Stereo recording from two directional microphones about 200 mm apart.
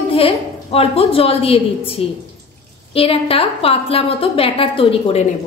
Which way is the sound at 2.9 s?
30° left (ahead or behind).